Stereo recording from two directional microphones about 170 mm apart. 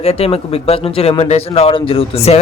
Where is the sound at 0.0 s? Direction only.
35° left (ahead or behind).